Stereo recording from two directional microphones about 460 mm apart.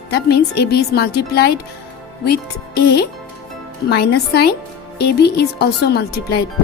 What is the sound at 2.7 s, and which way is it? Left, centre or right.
Speech, left.